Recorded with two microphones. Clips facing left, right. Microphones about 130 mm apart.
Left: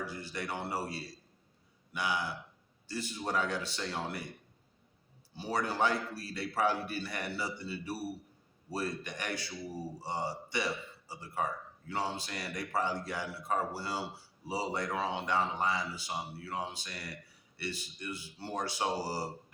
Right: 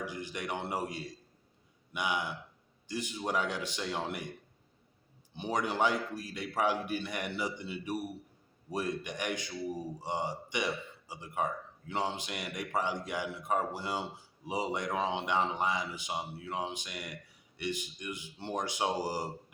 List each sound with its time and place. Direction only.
0.0 s a man's voice: 15° right (ahead or behind)
5.3 s a man's voice: 20° right (ahead or behind)